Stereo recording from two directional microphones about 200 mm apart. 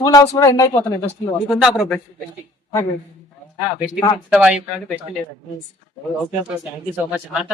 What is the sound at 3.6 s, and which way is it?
Speech, 5° right (ahead or behind).